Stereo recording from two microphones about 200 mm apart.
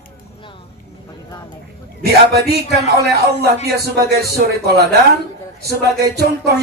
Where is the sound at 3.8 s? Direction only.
50° right (ahead or behind).